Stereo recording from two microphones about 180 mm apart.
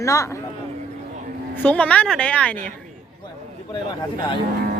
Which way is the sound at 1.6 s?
10° left (ahead or behind).